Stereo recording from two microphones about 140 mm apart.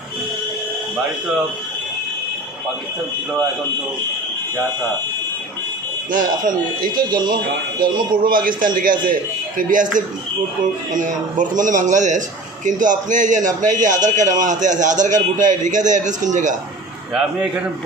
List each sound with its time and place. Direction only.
6.1 s speech: 70° right (ahead or behind)
7.3 s speech: 90° right
9.6 s a man's voice: 70° right (ahead or behind)
17.2 s a man's voice: 10° right (ahead or behind)